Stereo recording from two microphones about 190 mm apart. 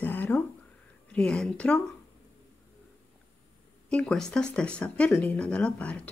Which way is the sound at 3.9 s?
5° left (ahead or behind).